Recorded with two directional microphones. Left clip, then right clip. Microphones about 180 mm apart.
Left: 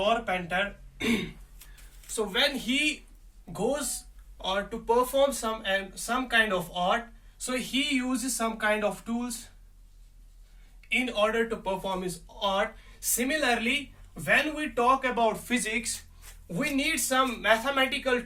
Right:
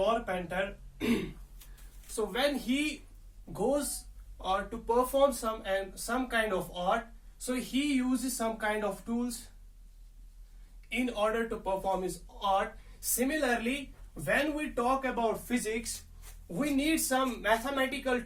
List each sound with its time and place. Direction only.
0.0 s speech: 15° left (ahead or behind)
2.3 s speech: 15° left (ahead or behind)
10.8 s speech: 15° left (ahead or behind)